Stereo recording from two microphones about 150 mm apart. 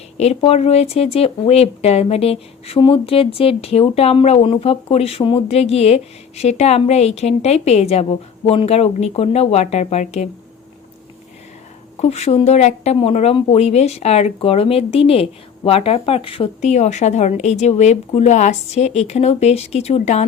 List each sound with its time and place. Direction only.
0.2 s speech: 45° left (ahead or behind)
11.9 s a woman's voice: 45° left (ahead or behind)
16.6 s speech: 50° left (ahead or behind)